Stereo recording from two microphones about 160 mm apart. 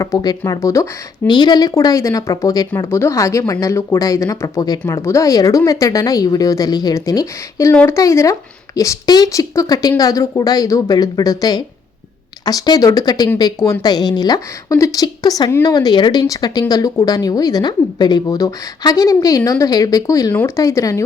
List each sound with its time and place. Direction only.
0.0 s a woman's voice: 25° left (ahead or behind)